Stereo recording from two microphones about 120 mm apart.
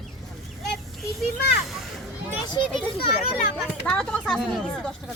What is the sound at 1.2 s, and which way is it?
Speech, centre (ahead or behind).